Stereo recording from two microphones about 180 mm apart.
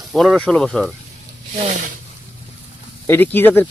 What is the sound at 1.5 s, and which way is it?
Speech, 35° right (ahead or behind).